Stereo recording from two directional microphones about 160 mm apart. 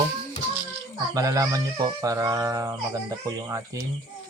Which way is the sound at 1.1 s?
20° right (ahead or behind).